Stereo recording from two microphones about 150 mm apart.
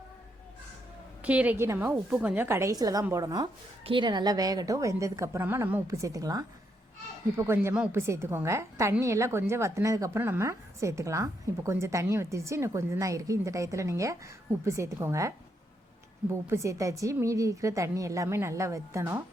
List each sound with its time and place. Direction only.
1.2 s a woman's voice: 10° right (ahead or behind)
16.3 s a woman's voice: 20° right (ahead or behind)